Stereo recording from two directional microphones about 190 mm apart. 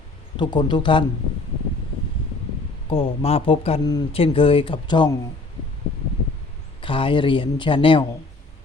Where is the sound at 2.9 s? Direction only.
30° left (ahead or behind).